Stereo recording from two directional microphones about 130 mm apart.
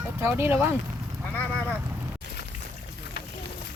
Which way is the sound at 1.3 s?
10° left (ahead or behind).